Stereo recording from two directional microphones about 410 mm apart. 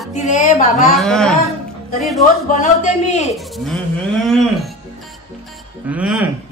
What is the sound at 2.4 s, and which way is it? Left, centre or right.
Speech, centre.